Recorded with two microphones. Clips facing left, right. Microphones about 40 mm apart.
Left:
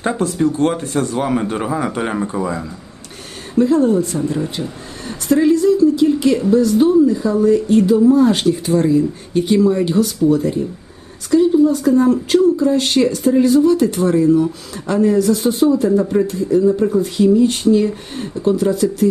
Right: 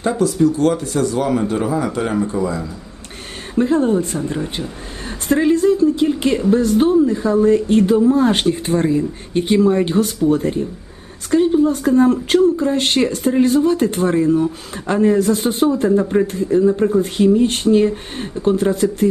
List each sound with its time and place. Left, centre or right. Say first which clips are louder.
0.2 s speech: right 2 dB; left
3.6 s speech: left 2 dB; right